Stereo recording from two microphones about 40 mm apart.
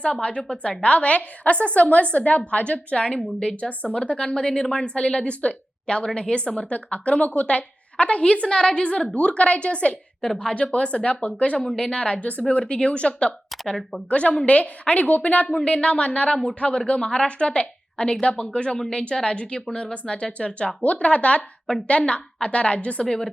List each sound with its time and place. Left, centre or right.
0.0 s a woman's voice: left
4.2 s a woman's voice: centre
11.5 s a woman's voice: centre